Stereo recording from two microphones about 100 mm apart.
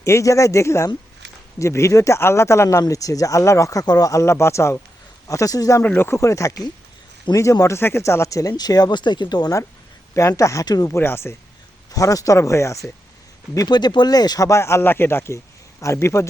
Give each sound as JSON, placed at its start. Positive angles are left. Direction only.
{"t": 0.0, "sound": "speech", "side_deg": 30}
{"t": 5.8, "sound": "speech", "side_deg": 15}
{"t": 6.1, "sound": "speech", "side_deg": 30}
{"t": 10.9, "sound": "speech", "side_deg": 25}
{"t": 11.9, "sound": "speech", "side_deg": 35}
{"t": 13.7, "sound": "speech", "side_deg": 45}